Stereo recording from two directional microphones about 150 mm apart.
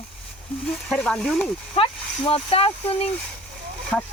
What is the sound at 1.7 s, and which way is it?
Speech, 40° left (ahead or behind).